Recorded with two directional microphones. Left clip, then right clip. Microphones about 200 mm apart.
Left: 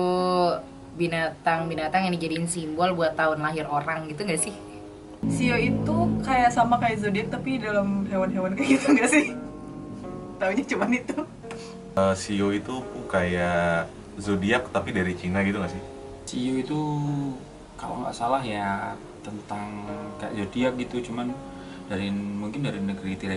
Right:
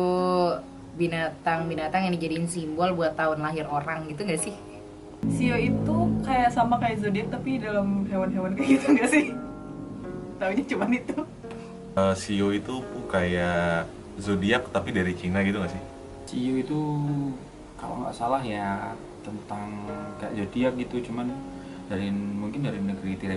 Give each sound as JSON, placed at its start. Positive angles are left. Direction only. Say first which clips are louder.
{"t": 0.0, "sound": "a woman's voice", "louder": "left 1 dB", "side_deg": -5}
{"t": 10.4, "sound": "a woman's voice", "louder": "left 2 dB", "side_deg": -15}
{"t": 17.8, "sound": "speech", "louder": "left 1 dB", "side_deg": -25}
{"t": 18.3, "sound": "a woman's voice", "louder": "left 2 dB", "side_deg": -5}
{"t": 20.2, "sound": "a woman's voice", "louder": "left 1 dB", "side_deg": -10}